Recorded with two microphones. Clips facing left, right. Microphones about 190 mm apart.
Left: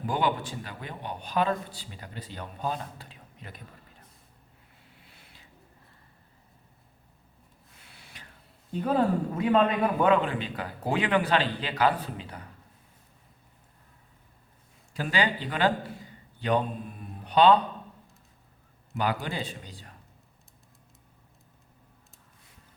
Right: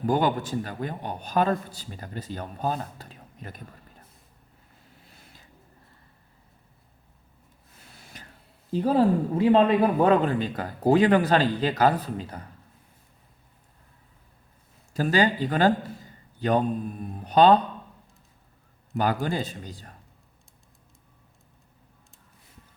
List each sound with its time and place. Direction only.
0.0 s a man's voice: 45° right (ahead or behind)
4.9 s a sound: 45° right (ahead or behind)
7.9 s snort: 45° right (ahead or behind)
8.7 s speech: 30° right (ahead or behind)
14.9 s a man's voice: 40° right (ahead or behind)
19.2 s a man's voice: 45° right (ahead or behind)